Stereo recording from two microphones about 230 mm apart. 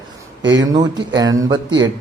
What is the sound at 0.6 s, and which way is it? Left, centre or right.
Speech, centre.